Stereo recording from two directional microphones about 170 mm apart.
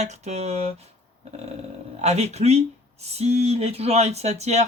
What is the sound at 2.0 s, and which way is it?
Speech, 40° right (ahead or behind).